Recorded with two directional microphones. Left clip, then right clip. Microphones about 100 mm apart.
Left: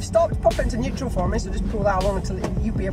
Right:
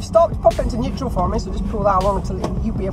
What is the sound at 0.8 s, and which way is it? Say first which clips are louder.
Speech: right 4 dB; 20° left (ahead or behind).